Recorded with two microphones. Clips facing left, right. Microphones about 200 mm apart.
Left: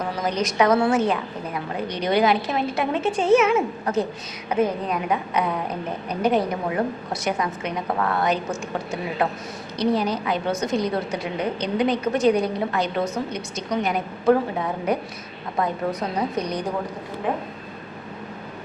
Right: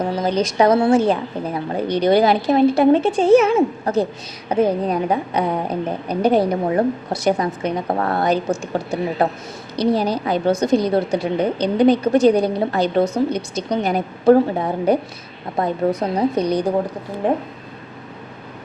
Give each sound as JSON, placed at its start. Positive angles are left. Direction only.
{"t": 0.0, "sound": "a woman's voice", "side_deg": -30}